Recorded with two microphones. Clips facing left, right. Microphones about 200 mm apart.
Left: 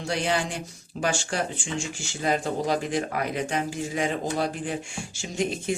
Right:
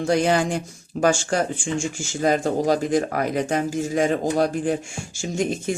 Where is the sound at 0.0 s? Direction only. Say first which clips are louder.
Right 7 dB; 45° right (ahead or behind).